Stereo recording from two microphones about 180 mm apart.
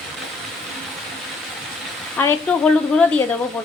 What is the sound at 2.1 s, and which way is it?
Speech, 10° left (ahead or behind).